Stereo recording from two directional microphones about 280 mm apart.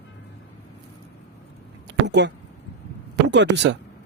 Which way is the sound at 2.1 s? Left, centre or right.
Right.